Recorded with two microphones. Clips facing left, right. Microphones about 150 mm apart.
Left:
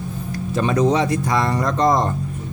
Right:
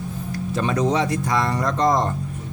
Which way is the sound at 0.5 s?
15° left (ahead or behind).